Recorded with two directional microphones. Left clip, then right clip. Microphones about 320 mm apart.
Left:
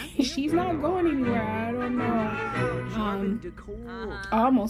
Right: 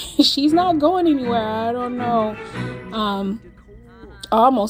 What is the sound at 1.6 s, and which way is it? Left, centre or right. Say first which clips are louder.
Music: right 7 dB; centre.